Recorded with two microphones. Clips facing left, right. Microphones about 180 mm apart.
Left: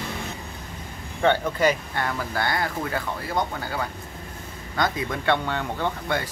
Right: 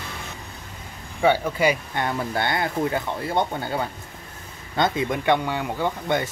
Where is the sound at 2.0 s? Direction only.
25° right (ahead or behind).